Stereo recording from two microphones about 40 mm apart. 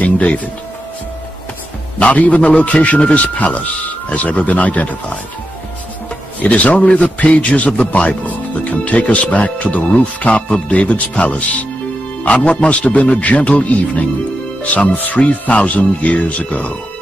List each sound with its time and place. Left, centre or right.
0.0 s speech: left
2.0 s speech: left
6.4 s speech: left
6.8 s a man's voice: left
7.2 s speech: left
12.6 s speech: left